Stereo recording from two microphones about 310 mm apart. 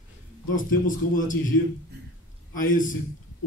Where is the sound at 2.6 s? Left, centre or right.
Left.